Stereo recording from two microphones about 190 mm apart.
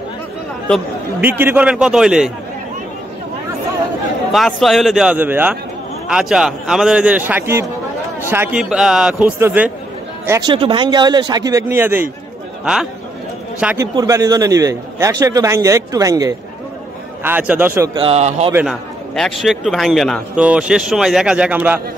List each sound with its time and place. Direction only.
1.2 s speech: 10° right (ahead or behind)
4.3 s a man's voice: centre (ahead or behind)
10.5 s a man's voice: 25° right (ahead or behind); by 13.8 s 5° right (ahead or behind)
13.9 s a man's voice: 20° right (ahead or behind)
17.9 s speech: 30° right (ahead or behind)
18.5 s a man's voice: 10° right (ahead or behind)